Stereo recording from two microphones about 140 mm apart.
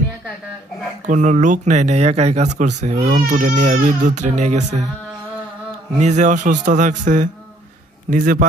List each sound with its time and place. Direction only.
1.0 s speech: 60° right (ahead or behind)
3.2 s speech: 70° right (ahead or behind); by 4.8 s 55° right (ahead or behind)
5.9 s speech: 55° right (ahead or behind)
8.1 s a man's voice: 75° right (ahead or behind)